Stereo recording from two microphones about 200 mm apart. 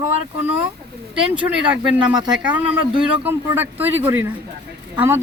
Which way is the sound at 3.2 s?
10° right (ahead or behind).